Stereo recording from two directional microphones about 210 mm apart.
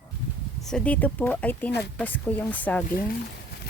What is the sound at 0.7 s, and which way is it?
Speech, 5° left (ahead or behind).